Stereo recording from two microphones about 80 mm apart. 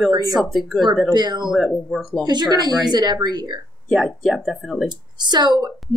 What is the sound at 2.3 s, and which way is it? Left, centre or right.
Speech, right.